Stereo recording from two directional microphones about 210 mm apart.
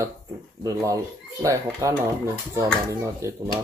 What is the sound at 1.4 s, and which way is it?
Speech, 15° right (ahead or behind).